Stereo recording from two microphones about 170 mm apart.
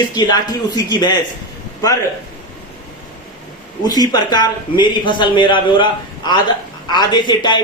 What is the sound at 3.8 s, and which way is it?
Speech, 25° left (ahead or behind).